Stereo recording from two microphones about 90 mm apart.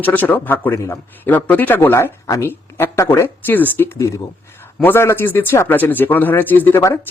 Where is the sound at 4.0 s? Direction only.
35° left (ahead or behind).